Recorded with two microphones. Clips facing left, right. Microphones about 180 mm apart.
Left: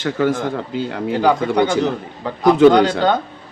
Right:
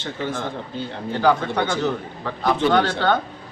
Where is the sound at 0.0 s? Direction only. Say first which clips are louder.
Left 9 dB; 90° left.